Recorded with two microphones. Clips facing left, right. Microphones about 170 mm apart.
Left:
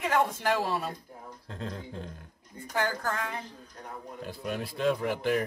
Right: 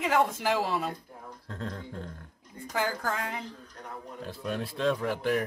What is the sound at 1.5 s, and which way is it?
Speech, 25° left (ahead or behind).